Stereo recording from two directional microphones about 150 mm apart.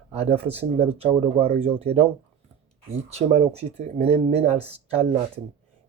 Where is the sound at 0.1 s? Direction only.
40° right (ahead or behind).